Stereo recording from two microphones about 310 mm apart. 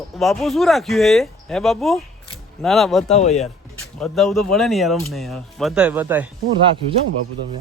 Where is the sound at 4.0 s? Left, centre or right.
Centre.